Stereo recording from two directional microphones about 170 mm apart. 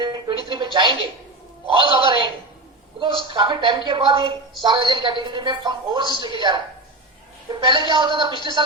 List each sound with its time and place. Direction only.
0.0 s music: 30° right (ahead or behind)
1.6 s a woman's voice: 30° right (ahead or behind)
7.6 s a woman's voice: 25° right (ahead or behind)